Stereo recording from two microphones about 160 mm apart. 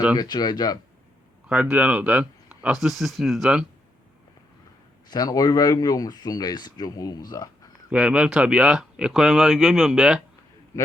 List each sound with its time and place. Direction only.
0.2 s speech: 25° left (ahead or behind)
1.7 s speech: 10° right (ahead or behind)
5.0 s speech: 25° left (ahead or behind)
7.9 s speech: 5° right (ahead or behind)